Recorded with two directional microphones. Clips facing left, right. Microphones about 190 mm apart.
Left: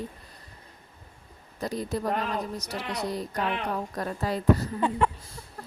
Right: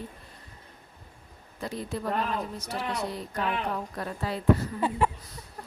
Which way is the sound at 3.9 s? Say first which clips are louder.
Left 3 dB; 40° left (ahead or behind).